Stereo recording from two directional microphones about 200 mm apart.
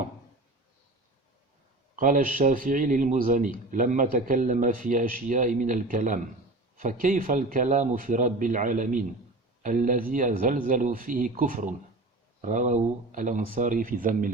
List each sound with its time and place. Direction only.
2.0 s a man's voice: 40° right (ahead or behind)